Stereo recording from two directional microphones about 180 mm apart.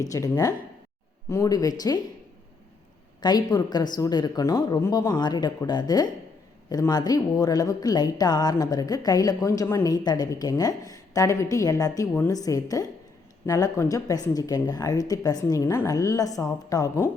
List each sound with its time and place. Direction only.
0.0 s a woman's voice: 20° left (ahead or behind)
3.2 s a woman's voice: 20° left (ahead or behind)